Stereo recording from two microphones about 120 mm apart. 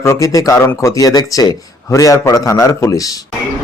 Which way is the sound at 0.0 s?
25° left (ahead or behind).